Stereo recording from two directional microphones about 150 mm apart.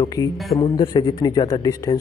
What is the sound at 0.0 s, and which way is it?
A man's voice, 25° left (ahead or behind).